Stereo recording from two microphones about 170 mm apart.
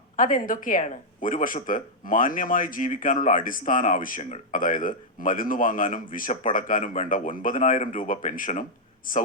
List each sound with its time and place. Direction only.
0.2 s speech: 50° left (ahead or behind)